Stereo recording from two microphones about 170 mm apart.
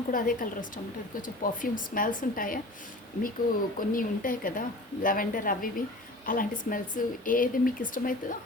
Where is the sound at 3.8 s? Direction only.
55° left (ahead or behind).